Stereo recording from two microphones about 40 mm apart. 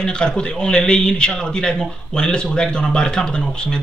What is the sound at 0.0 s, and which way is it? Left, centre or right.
Speech, left.